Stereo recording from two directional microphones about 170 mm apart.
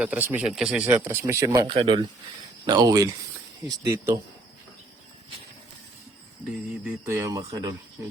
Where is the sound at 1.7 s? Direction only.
30° right (ahead or behind).